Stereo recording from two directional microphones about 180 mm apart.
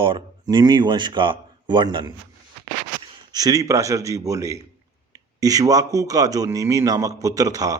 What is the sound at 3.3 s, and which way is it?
A man's voice, 20° right (ahead or behind).